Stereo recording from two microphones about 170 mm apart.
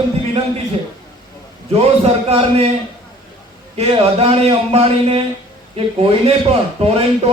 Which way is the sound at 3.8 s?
35° right (ahead or behind).